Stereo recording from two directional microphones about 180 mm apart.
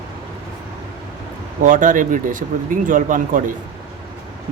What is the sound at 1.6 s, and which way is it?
Speech, 45° right (ahead or behind).